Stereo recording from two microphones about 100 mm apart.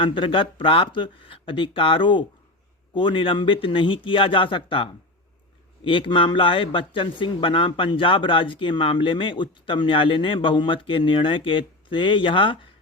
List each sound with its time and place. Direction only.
0.0 s speech: 55° left (ahead or behind)